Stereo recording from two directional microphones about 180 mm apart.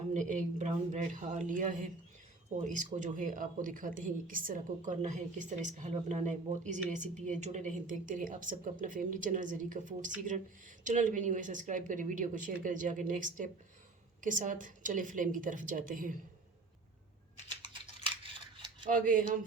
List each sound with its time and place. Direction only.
0.1 s a woman's voice: 45° right (ahead or behind)
18.5 s a sound: 25° right (ahead or behind)
18.9 s a woman's voice: 50° right (ahead or behind)